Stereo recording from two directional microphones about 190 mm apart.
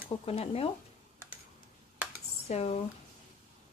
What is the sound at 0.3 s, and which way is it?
Speech, 30° left (ahead or behind).